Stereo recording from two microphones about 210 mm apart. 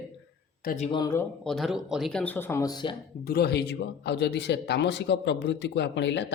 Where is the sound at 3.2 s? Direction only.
50° left (ahead or behind).